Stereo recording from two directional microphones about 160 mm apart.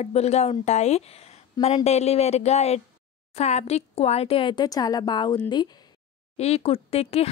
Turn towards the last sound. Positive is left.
turn(degrees=40)  # may be behind; listen again after turning